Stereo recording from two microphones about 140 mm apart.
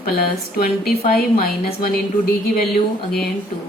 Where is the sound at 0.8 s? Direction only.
90° left.